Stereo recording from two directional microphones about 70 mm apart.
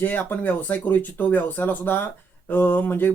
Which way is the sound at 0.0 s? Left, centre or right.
Left.